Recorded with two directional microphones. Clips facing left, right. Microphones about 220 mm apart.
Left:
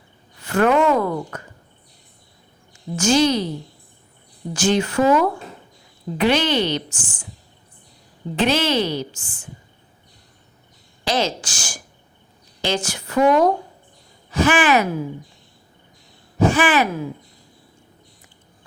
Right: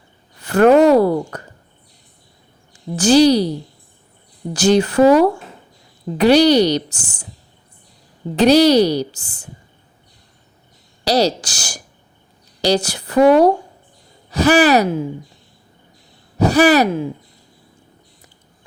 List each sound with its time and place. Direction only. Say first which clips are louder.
0.5 s a woman's voice: right 7 dB; 40° right (ahead or behind)
2.7 s a woman's voice: right 6 dB; 35° right (ahead or behind)
4.5 s a woman's voice: right 5 dB; 35° right (ahead or behind)
8.4 s a woman's voice: right 9 dB; 40° right (ahead or behind)
11.0 s a woman's voice: right 6 dB; 40° right (ahead or behind)
16.4 s a woman's voice: right 5 dB; 40° right (ahead or behind)